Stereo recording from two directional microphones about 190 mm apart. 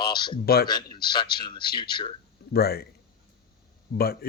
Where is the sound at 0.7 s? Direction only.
25° left (ahead or behind).